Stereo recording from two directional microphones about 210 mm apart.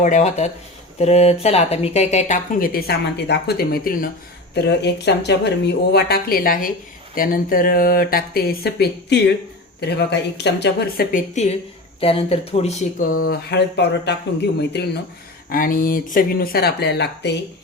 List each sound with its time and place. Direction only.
0.0 s speech: 35° left (ahead or behind)
13.2 s speech: 50° left (ahead or behind)
15.4 s speech: 40° left (ahead or behind)